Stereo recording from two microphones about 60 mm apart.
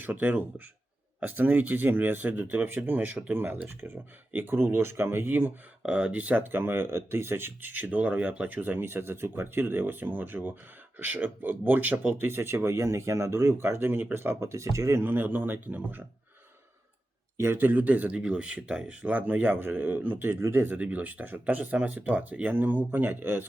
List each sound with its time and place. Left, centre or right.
0.0 s speech: right
5.8 s speech: centre; by 12.6 s right
12.6 s speech: right
15.0 s speech: right
17.3 s speech: right
20.7 s speech: right